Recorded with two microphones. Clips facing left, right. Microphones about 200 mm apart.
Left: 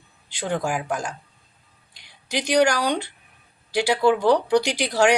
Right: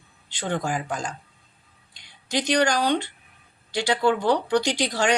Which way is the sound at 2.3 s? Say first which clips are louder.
Left 2 dB; 10° left (ahead or behind).